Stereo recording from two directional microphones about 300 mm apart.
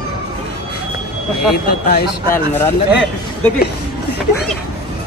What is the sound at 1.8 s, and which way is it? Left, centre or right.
Speech, left.